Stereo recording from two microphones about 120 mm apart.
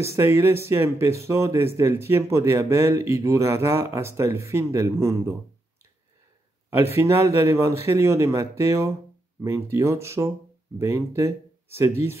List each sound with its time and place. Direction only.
0.0 s speech: 25° right (ahead or behind)
7.0 s speech: 20° right (ahead or behind)